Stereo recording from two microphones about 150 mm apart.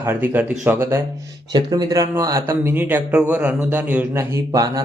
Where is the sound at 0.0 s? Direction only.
15° right (ahead or behind).